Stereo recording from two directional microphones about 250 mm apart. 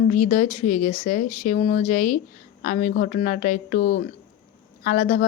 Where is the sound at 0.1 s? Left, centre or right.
Left.